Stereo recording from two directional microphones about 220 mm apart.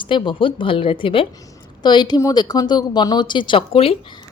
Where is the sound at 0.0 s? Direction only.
20° left (ahead or behind).